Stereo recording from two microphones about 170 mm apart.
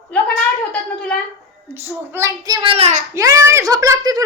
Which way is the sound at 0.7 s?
5° left (ahead or behind).